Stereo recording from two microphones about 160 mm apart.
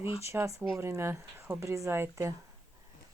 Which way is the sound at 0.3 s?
15° right (ahead or behind).